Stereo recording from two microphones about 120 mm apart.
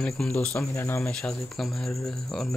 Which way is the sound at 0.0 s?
10° left (ahead or behind).